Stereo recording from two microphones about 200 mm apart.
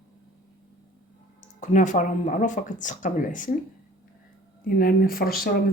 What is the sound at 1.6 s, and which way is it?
Speech, 40° left (ahead or behind).